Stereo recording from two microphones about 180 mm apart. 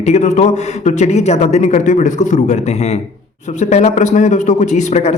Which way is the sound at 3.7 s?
40° left (ahead or behind).